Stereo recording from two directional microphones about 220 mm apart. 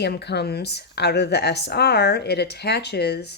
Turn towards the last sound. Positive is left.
turn(degrees=50)  # may be behind; listen again after turning